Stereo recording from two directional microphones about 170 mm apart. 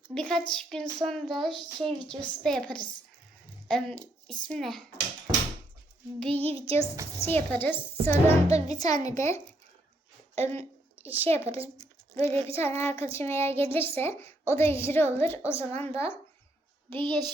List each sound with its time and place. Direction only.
0.1 s speech: 5° left (ahead or behind)
6.1 s speech: 5° left (ahead or behind)
6.4 s child singing: 35° right (ahead or behind)
7.3 s a child's voice: 10° left (ahead or behind)
8.5 s child singing: 40° right (ahead or behind)
8.8 s a child's voice: 20° left (ahead or behind)
10.3 s a sound: 40° right (ahead or behind)
11.2 s a child's voice: 15° left (ahead or behind)
12.3 s child singing: 35° right (ahead or behind)
12.5 s a child's voice: 15° left (ahead or behind)
16.9 s a child's voice: 30° right (ahead or behind)